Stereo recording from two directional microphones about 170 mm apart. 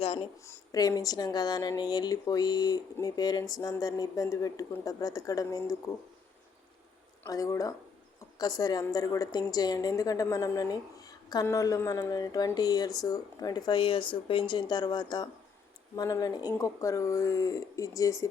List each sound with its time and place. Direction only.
0.0 s a sound: 35° left (ahead or behind)
0.4 s a woman's voice: 20° left (ahead or behind)
7.3 s a woman's voice: 20° left (ahead or behind)